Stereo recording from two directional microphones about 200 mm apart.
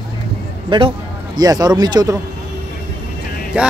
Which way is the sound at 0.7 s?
25° right (ahead or behind).